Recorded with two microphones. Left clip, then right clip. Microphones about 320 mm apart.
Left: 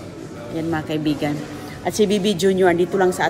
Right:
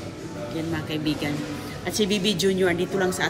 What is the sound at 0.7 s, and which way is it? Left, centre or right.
Speech, left.